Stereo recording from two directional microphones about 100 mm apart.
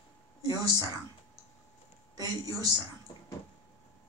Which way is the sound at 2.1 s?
40° right (ahead or behind).